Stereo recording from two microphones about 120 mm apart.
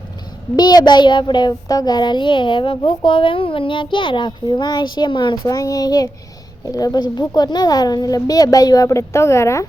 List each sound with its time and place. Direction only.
0.5 s a child's voice: 35° left (ahead or behind)
5.5 s a child's voice: 30° left (ahead or behind)